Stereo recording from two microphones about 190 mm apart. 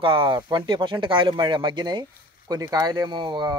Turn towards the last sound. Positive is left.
turn(degrees=-25)  # may be behind; listen again after turning